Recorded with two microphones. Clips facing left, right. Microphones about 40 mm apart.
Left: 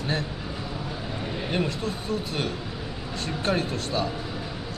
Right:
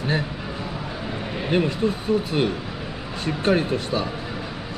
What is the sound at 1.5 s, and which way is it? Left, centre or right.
Speech, centre.